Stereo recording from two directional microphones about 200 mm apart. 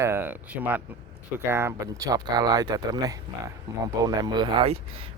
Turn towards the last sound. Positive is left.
turn(degrees=-30)  # may be behind; listen again after turning